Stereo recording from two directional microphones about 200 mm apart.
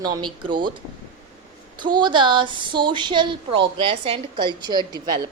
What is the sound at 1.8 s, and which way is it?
A woman's voice, 25° right (ahead or behind).